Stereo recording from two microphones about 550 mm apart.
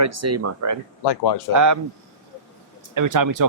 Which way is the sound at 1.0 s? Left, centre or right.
Left.